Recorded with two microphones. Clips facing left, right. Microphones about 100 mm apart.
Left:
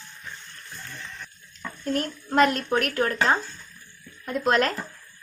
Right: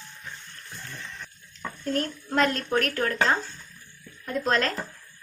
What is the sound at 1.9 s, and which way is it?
A woman's voice, 5° left (ahead or behind).